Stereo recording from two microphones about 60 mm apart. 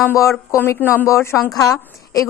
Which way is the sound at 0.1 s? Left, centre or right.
Left.